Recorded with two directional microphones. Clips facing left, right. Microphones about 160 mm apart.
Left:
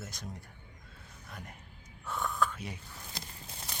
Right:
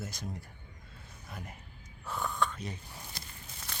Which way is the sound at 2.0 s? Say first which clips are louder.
Left 1 dB; centre (ahead or behind).